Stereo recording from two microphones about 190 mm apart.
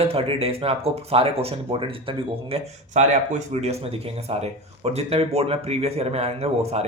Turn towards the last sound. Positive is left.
turn(degrees=-35)  # may be behind; listen again after turning